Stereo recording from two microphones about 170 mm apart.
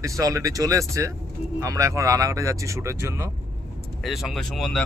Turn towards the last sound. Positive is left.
turn(degrees=0)  # may be behind; listen again after turning